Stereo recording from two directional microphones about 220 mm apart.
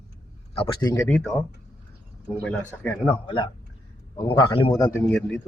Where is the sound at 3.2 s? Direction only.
20° left (ahead or behind); by 5.4 s 5° left (ahead or behind).